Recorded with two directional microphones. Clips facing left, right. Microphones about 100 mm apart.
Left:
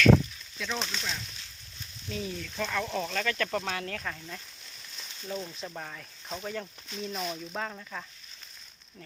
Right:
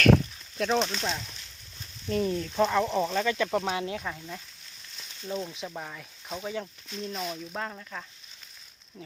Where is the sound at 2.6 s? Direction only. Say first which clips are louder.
Right 7 dB; 25° right (ahead or behind); by 8.0 s centre (ahead or behind).